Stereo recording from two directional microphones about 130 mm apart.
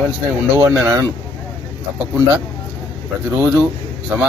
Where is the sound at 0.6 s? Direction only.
15° right (ahead or behind).